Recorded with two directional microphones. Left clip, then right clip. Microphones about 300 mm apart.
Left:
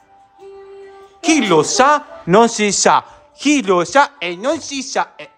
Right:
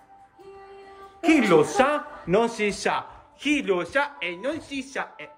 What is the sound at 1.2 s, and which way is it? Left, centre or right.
A man's voice, centre.